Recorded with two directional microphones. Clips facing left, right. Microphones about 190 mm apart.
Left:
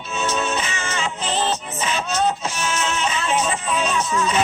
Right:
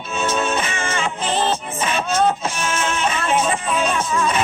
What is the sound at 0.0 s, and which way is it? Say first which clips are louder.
Music: right 2 dB; 55° right (ahead or behind).